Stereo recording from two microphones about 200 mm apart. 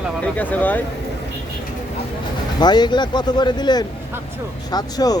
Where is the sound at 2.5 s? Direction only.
20° left (ahead or behind).